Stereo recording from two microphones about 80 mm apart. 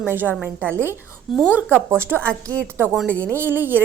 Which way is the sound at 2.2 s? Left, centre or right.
Centre.